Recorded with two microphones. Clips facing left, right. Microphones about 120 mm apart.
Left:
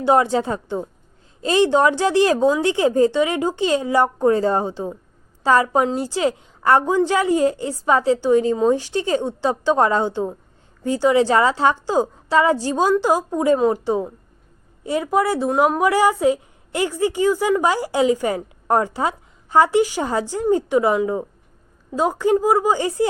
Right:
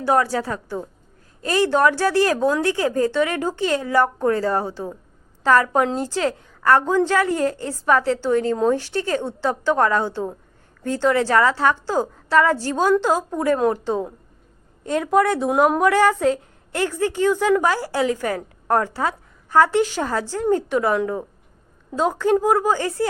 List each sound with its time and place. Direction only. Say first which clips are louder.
0.0 s a woman's voice: left 3 dB; 20° left (ahead or behind)